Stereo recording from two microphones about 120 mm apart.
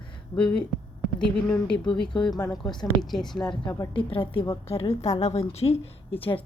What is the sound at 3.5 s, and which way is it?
A woman's voice, 40° left (ahead or behind).